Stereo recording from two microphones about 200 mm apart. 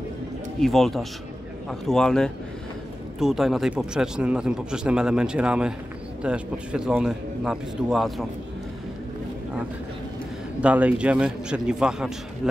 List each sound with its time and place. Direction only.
0.6 s speech: centre (ahead or behind)
10.6 s speech: 5° right (ahead or behind)